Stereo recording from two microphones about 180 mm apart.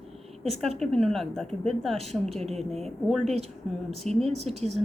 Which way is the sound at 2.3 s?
35° right (ahead or behind).